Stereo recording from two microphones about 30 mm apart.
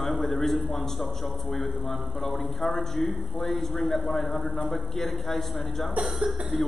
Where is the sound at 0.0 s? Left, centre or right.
Centre.